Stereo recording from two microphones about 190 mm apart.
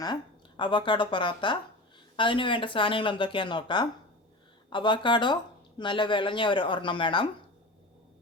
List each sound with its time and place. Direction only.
0.0 s speech: 25° left (ahead or behind)